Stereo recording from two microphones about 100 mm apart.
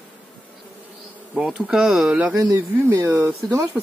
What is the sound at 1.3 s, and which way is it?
Speech, 5° right (ahead or behind).